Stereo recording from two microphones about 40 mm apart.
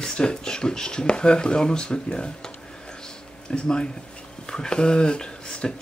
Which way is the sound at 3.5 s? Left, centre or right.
Left.